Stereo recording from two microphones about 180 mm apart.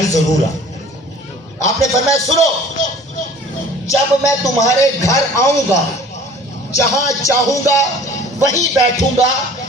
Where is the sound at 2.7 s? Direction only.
40° left (ahead or behind).